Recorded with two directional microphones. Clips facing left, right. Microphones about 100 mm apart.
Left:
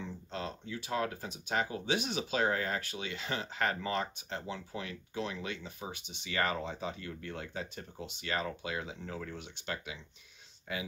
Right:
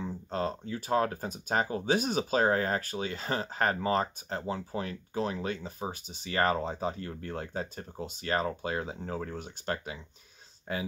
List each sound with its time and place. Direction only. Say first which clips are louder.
0.0 s speech: right 7 dB; 40° right (ahead or behind)